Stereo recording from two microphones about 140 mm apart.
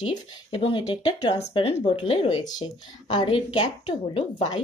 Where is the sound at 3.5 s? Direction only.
45° left (ahead or behind).